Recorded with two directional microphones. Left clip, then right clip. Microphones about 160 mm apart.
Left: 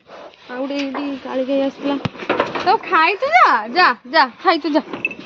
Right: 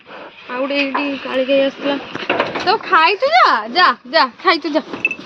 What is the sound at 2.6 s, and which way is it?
Speech, 35° left (ahead or behind).